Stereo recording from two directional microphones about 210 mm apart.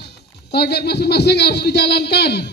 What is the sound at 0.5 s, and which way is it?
A man's voice, 50° left (ahead or behind).